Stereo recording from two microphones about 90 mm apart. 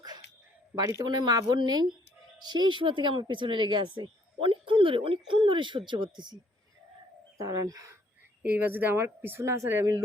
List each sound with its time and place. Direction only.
0.8 s speech: 40° right (ahead or behind)
1.0 s speech: 50° right (ahead or behind)
7.3 s speech: 40° right (ahead or behind)
8.4 s speech: 20° right (ahead or behind)